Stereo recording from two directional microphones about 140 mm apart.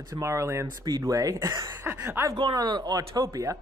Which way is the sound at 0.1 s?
20° right (ahead or behind).